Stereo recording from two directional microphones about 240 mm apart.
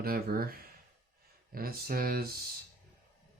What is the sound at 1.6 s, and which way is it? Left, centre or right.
Speech, right.